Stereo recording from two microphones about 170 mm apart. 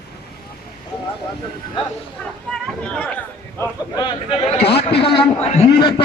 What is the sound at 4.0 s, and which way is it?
A man's voice, 30° left (ahead or behind).